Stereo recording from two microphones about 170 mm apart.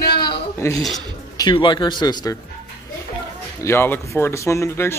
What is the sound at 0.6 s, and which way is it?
Speech, 15° left (ahead or behind).